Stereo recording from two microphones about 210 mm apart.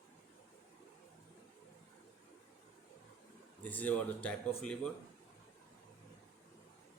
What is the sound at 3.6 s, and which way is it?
Speech, 5° left (ahead or behind).